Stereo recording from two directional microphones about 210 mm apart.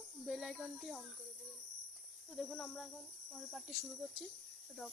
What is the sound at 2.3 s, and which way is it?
Speech, centre (ahead or behind).